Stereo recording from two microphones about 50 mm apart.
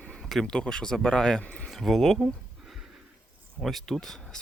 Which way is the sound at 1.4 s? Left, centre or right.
Left.